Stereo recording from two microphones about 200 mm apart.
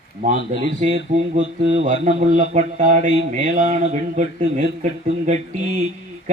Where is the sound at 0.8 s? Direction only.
35° right (ahead or behind).